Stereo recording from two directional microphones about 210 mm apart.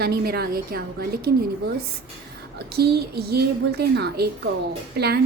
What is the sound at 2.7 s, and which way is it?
A woman's voice, 50° right (ahead or behind).